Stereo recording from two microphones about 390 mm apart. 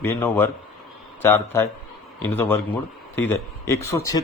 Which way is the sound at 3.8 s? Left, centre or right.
Left.